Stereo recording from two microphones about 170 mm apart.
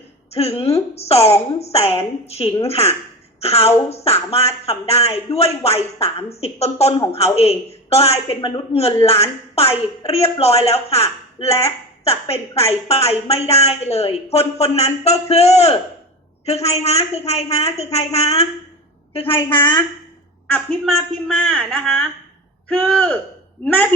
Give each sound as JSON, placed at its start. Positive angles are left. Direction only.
{"t": 0.3, "sound": "a woman's voice", "side_deg": 35}
{"t": 20.5, "sound": "a woman's voice", "side_deg": 5}